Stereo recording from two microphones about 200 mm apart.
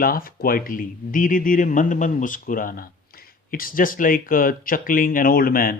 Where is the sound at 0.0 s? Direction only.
45° left (ahead or behind).